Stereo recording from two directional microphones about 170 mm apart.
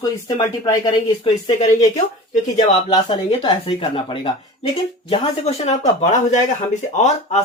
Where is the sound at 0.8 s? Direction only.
35° left (ahead or behind).